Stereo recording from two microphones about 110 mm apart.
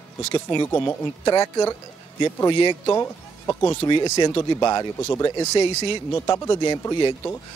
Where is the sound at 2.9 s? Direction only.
25° left (ahead or behind).